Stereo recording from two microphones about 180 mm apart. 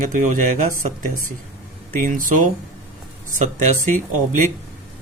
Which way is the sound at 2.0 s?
45° right (ahead or behind).